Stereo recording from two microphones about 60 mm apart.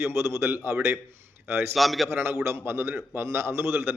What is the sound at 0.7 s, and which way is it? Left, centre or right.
Speech, centre.